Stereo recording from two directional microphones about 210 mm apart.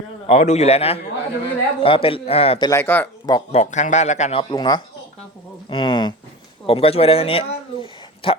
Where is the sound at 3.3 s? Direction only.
30° left (ahead or behind).